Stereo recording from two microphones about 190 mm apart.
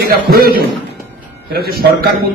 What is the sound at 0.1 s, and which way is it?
A man's voice, 55° right (ahead or behind).